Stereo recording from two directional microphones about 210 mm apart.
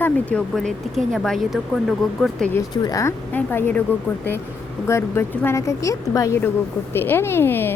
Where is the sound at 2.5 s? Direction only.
20° left (ahead or behind).